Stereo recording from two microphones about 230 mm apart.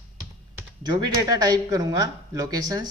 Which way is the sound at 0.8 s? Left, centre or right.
Centre.